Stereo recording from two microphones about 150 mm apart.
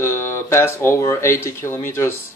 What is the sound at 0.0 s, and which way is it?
A man's voice, 15° left (ahead or behind).